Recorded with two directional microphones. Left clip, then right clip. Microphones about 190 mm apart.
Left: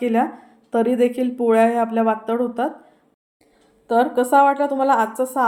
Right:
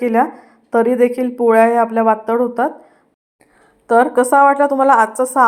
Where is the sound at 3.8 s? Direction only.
25° right (ahead or behind).